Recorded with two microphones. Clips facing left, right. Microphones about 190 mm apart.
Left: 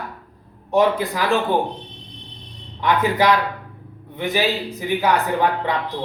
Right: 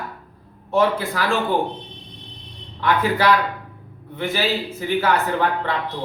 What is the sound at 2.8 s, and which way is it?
A man's voice, 20° left (ahead or behind).